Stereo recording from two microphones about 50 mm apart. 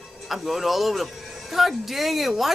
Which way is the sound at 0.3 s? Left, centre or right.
Centre.